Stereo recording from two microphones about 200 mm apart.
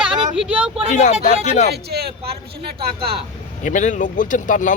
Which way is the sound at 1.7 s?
50° right (ahead or behind).